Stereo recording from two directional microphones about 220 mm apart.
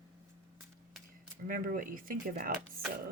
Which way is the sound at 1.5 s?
40° right (ahead or behind).